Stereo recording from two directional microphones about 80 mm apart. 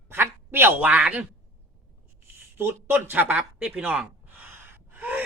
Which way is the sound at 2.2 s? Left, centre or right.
Right.